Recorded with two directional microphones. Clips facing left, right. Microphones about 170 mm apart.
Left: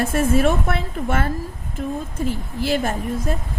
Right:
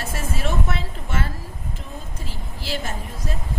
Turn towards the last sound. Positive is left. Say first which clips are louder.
# left 8 dB
turn(degrees=50)  # may be behind; listen again after turning